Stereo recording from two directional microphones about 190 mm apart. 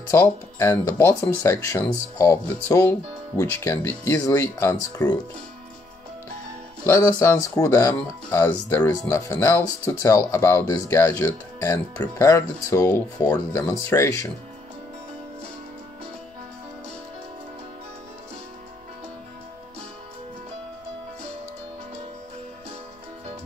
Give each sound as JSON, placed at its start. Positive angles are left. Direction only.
{"t": 0.1, "sound": "speech", "side_deg": 15}
{"t": 6.9, "sound": "speech", "side_deg": 15}